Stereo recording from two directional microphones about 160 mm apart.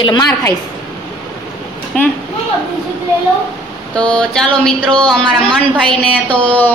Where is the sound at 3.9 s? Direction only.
5° left (ahead or behind).